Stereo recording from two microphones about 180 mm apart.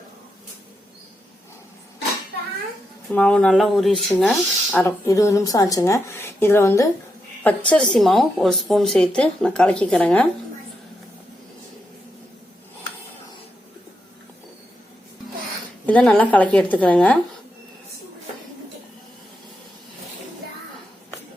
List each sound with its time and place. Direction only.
3.1 s a woman's voice: 5° left (ahead or behind)
15.9 s speech: 5° left (ahead or behind)